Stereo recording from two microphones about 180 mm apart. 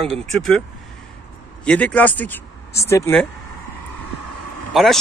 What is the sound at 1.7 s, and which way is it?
Speech, 10° left (ahead or behind).